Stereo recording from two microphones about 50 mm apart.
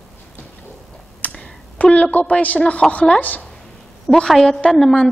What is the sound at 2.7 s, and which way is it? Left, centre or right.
Speech, left.